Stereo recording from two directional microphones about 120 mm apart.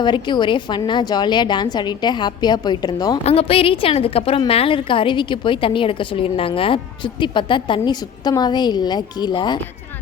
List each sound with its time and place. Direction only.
0.0 s a woman's voice: 40° left (ahead or behind)
3.2 s a woman's voice: 55° left (ahead or behind); by 9.6 s 40° left (ahead or behind)